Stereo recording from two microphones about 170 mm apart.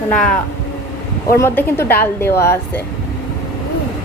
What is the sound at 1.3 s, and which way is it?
A woman's voice, 15° left (ahead or behind).